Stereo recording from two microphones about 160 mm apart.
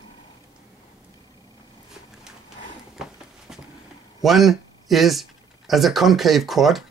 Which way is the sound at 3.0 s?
5° right (ahead or behind).